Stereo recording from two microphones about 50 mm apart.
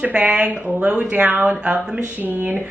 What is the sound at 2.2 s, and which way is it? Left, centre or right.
Speech, right.